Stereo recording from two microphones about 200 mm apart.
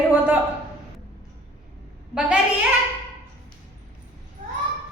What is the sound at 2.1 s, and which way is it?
Speech, 5° right (ahead or behind).